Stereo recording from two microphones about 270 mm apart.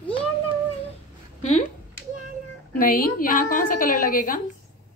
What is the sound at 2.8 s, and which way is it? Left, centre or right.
A woman's voice, left.